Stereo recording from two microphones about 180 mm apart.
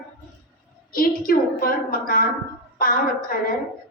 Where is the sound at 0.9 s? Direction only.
50° left (ahead or behind).